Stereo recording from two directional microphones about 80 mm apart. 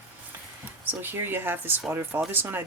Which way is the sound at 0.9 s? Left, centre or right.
Right.